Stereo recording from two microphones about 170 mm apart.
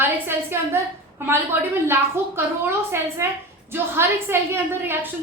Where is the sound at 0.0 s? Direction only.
15° right (ahead or behind).